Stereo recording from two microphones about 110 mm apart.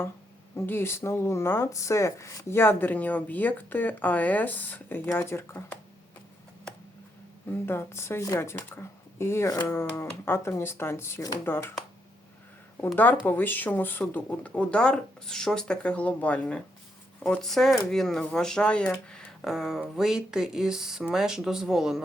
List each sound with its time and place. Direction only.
0.5 s speech: 20° left (ahead or behind)
7.5 s speech: 20° left (ahead or behind)
9.5 s speech: 35° left (ahead or behind)
9.7 s speech: 25° left (ahead or behind)
13.2 s speech: 15° left (ahead or behind); by 22.0 s centre (ahead or behind)